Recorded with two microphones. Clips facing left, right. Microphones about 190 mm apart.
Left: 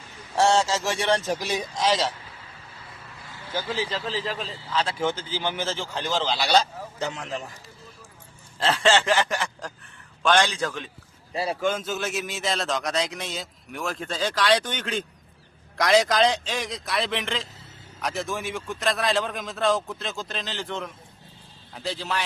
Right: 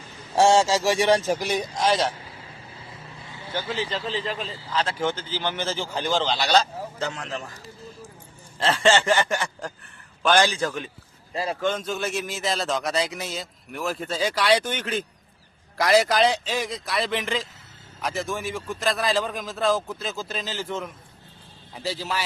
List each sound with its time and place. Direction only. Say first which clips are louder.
0.3 s speech: right 3 dB; 15° right (ahead or behind)
1.4 s a man's voice: right 2 dB; centre (ahead or behind)
3.7 s a man's voice: right 1 dB; centre (ahead or behind)
5.6 s a man's voice: right 2 dB; centre (ahead or behind); by 7.5 s 15° left (ahead or behind)
8.5 s a man's voice: right 1 dB; centre (ahead or behind)
11.3 s a man's voice: even; 10° left (ahead or behind); by 22.2 s 5° right (ahead or behind)